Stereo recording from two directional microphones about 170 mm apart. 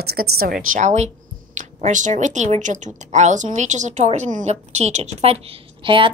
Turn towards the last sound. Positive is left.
turn(degrees=-30)  # may be behind; listen again after turning